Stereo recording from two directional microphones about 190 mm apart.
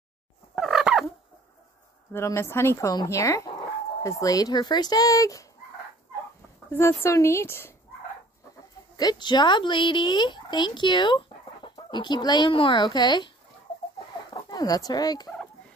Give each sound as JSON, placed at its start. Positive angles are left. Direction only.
{"t": 0.6, "sound": "fowl", "side_deg": 0}
{"t": 2.1, "sound": "speech", "side_deg": 15}
{"t": 6.7, "sound": "speech", "side_deg": 15}
{"t": 8.9, "sound": "speech", "side_deg": 20}
{"t": 14.3, "sound": "speech", "side_deg": 20}